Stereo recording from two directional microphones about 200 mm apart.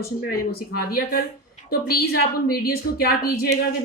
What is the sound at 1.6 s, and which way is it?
A woman's voice, 50° left (ahead or behind).